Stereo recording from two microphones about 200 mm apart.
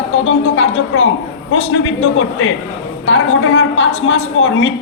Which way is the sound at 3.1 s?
70° left (ahead or behind).